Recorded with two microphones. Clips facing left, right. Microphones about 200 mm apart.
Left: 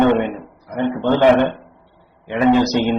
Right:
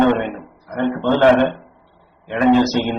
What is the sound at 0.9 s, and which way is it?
Speech, 15° left (ahead or behind).